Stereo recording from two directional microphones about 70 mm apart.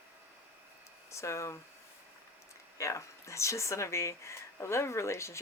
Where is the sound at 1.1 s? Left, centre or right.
Left.